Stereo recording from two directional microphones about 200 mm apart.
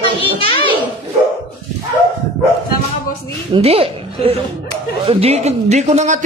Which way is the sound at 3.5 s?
30° right (ahead or behind).